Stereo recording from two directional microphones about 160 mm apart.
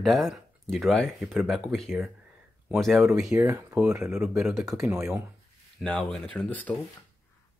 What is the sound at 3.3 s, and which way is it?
Speech, 20° right (ahead or behind).